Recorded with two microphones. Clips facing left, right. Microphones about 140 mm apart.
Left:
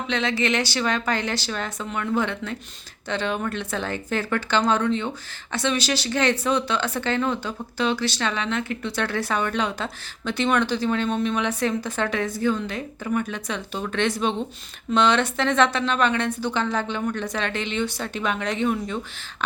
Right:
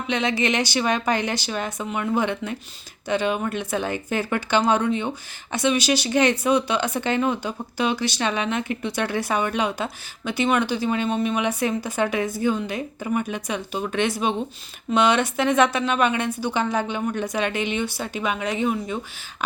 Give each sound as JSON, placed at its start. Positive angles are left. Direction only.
{"t": 0.1, "sound": "speech", "side_deg": -15}